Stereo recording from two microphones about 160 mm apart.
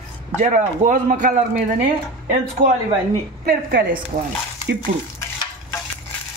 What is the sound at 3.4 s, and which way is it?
Speech, 65° right (ahead or behind).